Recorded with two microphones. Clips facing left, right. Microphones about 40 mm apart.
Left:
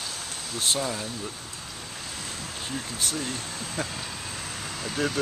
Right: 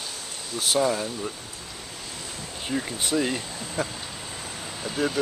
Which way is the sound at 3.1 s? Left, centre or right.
Right.